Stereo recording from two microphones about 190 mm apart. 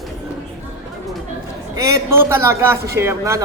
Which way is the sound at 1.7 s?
15° right (ahead or behind).